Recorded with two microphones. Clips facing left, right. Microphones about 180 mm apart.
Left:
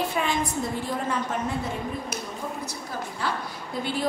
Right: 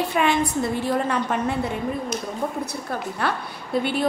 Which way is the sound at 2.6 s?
60° right (ahead or behind).